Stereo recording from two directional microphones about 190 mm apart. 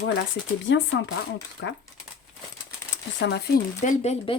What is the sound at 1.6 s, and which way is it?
Speech, 90° left.